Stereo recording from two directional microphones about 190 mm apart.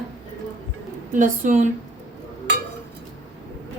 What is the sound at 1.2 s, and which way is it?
Speech, 40° right (ahead or behind).